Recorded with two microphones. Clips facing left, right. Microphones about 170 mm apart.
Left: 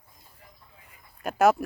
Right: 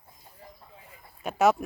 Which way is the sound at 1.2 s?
Centre (ahead or behind).